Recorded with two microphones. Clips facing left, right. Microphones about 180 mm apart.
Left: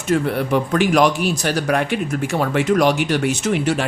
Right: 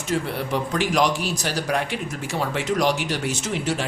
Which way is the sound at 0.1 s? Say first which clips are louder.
Left 7 dB; 55° left (ahead or behind).